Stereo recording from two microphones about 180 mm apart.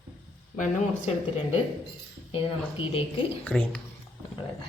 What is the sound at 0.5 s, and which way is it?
Speech, 45° left (ahead or behind).